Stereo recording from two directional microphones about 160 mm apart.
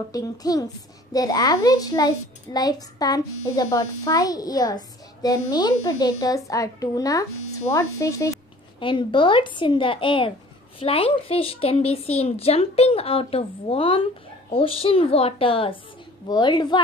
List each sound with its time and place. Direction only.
0.1 s a child's voice: 25° left (ahead or behind)
8.7 s a woman's voice: 30° left (ahead or behind)